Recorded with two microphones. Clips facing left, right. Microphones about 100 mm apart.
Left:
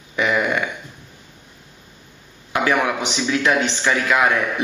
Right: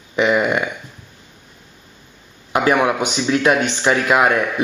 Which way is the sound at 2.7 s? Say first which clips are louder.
Right 4 dB; 15° right (ahead or behind).